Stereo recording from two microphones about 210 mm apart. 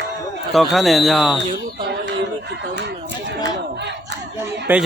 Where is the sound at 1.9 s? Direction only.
55° right (ahead or behind).